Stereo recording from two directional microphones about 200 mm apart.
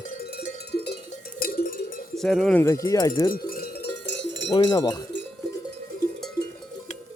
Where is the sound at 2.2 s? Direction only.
Centre (ahead or behind).